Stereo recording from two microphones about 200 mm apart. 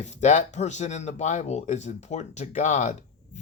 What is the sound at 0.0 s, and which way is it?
Speech, 35° left (ahead or behind).